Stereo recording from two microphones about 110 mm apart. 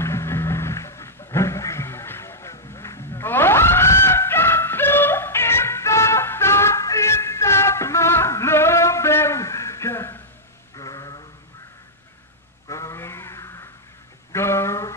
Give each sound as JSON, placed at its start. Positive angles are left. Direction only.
{"t": 0.0, "sound": "music", "side_deg": 25}
{"t": 10.8, "sound": "sheep", "side_deg": 35}
{"t": 12.6, "sound": "a sound", "side_deg": 30}